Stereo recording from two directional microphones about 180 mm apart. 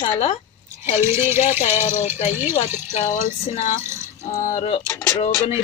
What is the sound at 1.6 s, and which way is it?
Speech, 40° left (ahead or behind).